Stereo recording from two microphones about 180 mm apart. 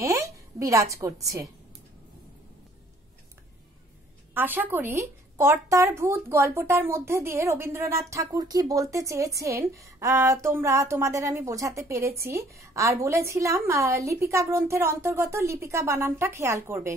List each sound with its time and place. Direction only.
0.0 s a woman's voice: 15° right (ahead or behind)
4.3 s a woman's voice: 10° right (ahead or behind)